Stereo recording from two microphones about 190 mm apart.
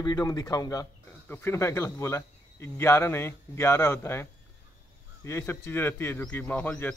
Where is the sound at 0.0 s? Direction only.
20° left (ahead or behind).